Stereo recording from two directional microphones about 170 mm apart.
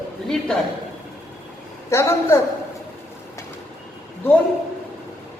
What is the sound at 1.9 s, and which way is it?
Speech, 15° left (ahead or behind).